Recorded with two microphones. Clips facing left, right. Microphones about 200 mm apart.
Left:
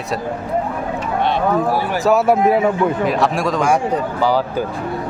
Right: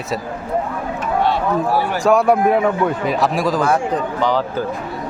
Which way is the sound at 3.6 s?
10° left (ahead or behind).